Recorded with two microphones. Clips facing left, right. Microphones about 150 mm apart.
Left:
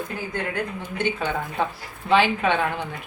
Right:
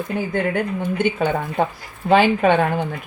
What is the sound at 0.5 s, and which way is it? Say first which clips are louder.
Speech: right 7 dB; 50° right (ahead or behind).